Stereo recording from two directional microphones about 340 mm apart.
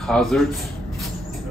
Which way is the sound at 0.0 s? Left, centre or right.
Centre.